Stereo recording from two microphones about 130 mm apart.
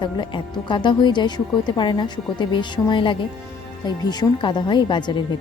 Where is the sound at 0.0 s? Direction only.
35° left (ahead or behind).